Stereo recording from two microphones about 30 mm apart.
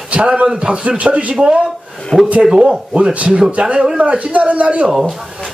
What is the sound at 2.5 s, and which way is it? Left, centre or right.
Speech, right.